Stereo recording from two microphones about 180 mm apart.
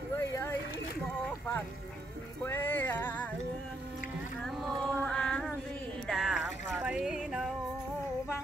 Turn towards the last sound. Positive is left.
turn(degrees=-5)  # may be behind; listen again after turning